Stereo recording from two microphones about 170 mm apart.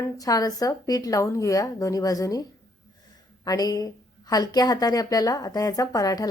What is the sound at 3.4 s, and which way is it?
A woman's voice, 20° left (ahead or behind).